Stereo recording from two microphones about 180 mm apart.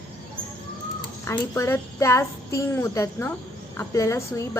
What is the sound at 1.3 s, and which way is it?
A woman's voice, 15° left (ahead or behind).